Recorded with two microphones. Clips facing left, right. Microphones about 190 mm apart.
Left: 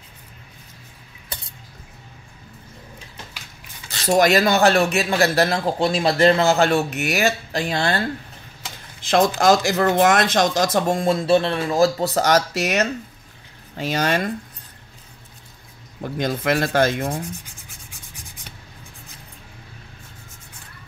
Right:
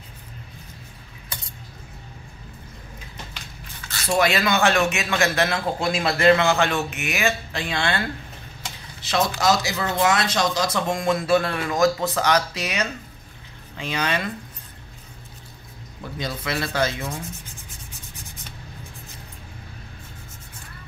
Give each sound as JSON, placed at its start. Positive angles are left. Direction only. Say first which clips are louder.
{"t": 4.0, "sound": "speech", "louder": "left 5 dB", "side_deg": 40}
{"t": 9.0, "sound": "speech", "louder": "left 5 dB", "side_deg": 50}
{"t": 16.0, "sound": "speech", "louder": "left 7 dB", "side_deg": 50}